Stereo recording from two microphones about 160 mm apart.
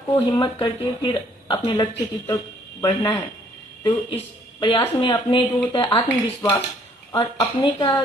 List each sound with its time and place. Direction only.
0.4 s speech: 30° left (ahead or behind)